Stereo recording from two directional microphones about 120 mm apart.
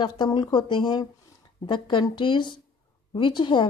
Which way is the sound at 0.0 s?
40° left (ahead or behind).